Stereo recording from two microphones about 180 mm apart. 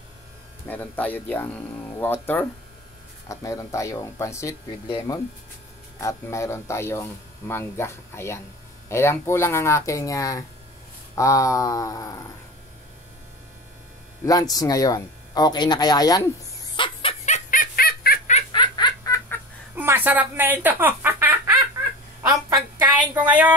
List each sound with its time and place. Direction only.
0.7 s speech: 10° left (ahead or behind)
3.3 s speech: 15° left (ahead or behind)
14.2 s speech: 20° left (ahead or behind)
16.7 s a sound: 30° left (ahead or behind); by 18.3 s 55° left (ahead or behind)
18.5 s giggle: 25° left (ahead or behind)
19.7 s speech: 10° right (ahead or behind)
22.2 s a sound: 20° right (ahead or behind)
23.1 s speech: 10° right (ahead or behind)